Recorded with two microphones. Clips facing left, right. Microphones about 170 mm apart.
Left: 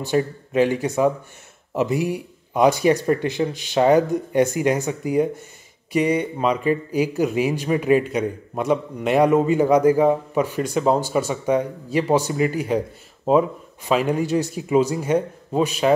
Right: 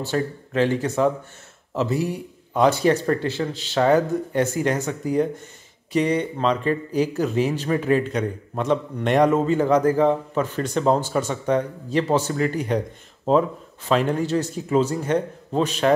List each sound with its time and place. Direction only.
0.0 s speech: 15° left (ahead or behind)